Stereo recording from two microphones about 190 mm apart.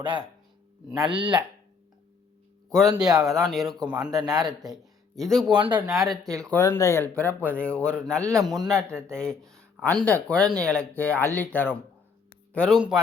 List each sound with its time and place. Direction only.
0.0 s a man's voice: 25° right (ahead or behind)
2.6 s speech: centre (ahead or behind)
4.1 s a man's voice: 20° right (ahead or behind)
4.7 s speech: centre (ahead or behind)
5.5 s a man's voice: 25° right (ahead or behind)
5.8 s speech: centre (ahead or behind)
6.2 s speech: 15° right (ahead or behind)
6.5 s speech: 15° left (ahead or behind); by 8.7 s centre (ahead or behind)
8.9 s speech: 15° right (ahead or behind)
9.1 s speech: 5° left (ahead or behind)